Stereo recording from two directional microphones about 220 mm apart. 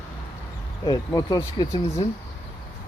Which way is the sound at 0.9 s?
15° left (ahead or behind).